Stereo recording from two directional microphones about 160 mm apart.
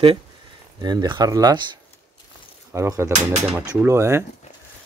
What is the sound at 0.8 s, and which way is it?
Speech, 25° right (ahead or behind).